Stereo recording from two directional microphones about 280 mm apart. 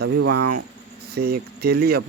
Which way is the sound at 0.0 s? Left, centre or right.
Right.